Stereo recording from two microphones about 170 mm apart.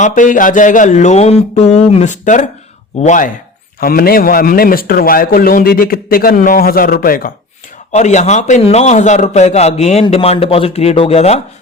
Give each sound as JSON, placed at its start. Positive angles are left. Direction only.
{"t": 0.0, "sound": "speech", "side_deg": 50}
{"t": 3.8, "sound": "a man's voice", "side_deg": 60}
{"t": 7.9, "sound": "a man's voice", "side_deg": 45}